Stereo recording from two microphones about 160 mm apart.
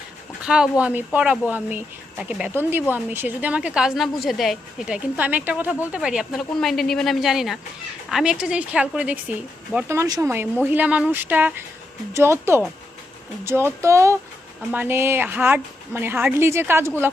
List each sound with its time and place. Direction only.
0.4 s a woman's voice: 5° right (ahead or behind)